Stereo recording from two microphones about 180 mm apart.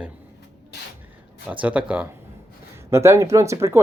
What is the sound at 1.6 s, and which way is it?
Speech, 5° right (ahead or behind).